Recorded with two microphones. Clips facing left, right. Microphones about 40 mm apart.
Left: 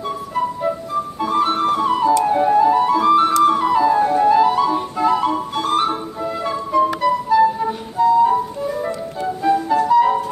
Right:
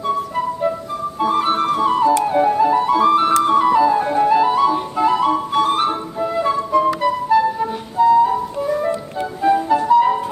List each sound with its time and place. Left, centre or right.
1.2 s flute: centre
8.2 s music: centre